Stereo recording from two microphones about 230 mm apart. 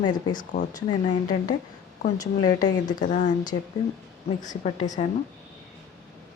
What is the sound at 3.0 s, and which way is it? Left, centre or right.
Speech, left.